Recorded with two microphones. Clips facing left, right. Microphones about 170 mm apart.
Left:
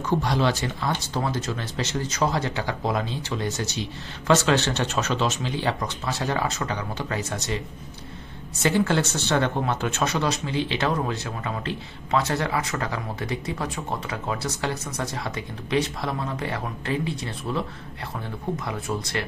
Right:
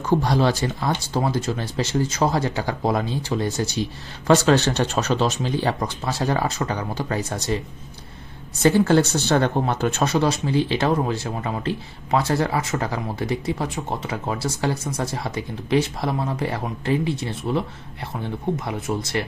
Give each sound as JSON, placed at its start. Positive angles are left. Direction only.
{"t": 0.2, "sound": "speech", "side_deg": -40}
{"t": 8.6, "sound": "speech", "side_deg": -40}
{"t": 18.6, "sound": "speech", "side_deg": -20}